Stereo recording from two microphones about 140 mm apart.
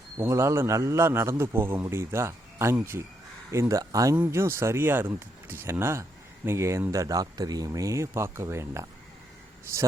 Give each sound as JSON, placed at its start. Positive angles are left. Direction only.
{"t": 0.2, "sound": "speech", "side_deg": -20}